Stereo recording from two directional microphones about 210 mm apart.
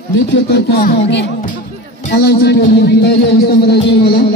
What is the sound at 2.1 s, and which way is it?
Speech, 50° left (ahead or behind).